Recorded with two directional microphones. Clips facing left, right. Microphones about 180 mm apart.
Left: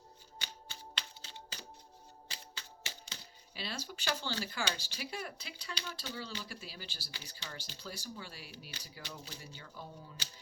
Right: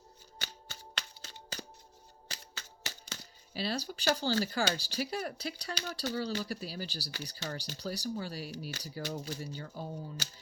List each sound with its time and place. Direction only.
0.3 s music: 45° right (ahead or behind)
2.3 s speech: 45° right (ahead or behind)